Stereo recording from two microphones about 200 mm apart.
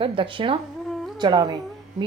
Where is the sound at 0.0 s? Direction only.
25° right (ahead or behind).